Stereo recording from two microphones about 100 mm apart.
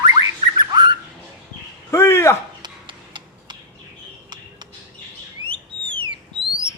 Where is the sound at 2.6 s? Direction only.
50° right (ahead or behind).